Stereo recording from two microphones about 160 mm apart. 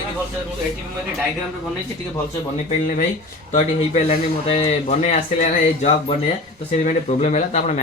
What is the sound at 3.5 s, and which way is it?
Speech, 45° left (ahead or behind).